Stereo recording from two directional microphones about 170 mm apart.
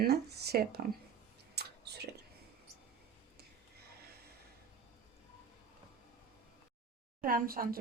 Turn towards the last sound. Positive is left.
turn(degrees=-60)  # may be behind; listen again after turning